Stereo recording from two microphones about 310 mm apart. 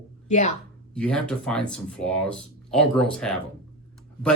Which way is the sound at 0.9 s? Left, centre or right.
Centre.